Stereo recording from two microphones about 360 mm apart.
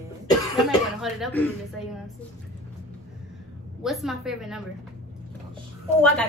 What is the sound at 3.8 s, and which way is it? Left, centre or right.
Speech, centre.